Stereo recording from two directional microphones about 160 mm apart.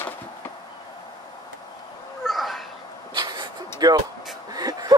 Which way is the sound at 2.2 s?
Centre (ahead or behind).